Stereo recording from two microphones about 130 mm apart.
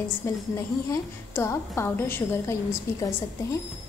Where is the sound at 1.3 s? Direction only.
20° left (ahead or behind).